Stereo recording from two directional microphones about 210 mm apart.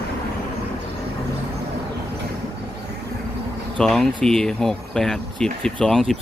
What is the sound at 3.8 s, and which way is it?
Speech, 5° left (ahead or behind).